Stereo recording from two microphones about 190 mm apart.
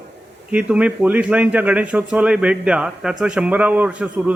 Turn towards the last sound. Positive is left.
turn(degrees=-5)  # may be behind; listen again after turning